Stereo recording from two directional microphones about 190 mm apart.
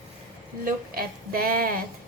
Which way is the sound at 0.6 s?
50° right (ahead or behind).